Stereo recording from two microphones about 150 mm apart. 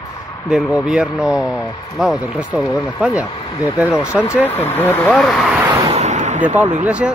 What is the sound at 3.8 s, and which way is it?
Speech, 15° left (ahead or behind).